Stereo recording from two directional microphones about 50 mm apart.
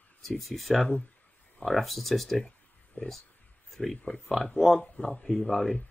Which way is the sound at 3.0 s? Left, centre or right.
Left.